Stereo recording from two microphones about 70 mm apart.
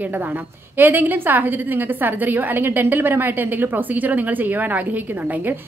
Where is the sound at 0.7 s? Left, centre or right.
Right.